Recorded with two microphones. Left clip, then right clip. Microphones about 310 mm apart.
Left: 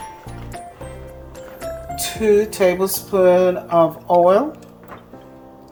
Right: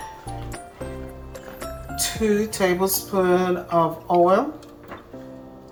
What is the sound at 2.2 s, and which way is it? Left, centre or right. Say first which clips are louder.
Speech: left 7 dB; left.